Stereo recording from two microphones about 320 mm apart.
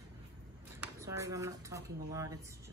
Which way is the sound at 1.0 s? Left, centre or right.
Centre.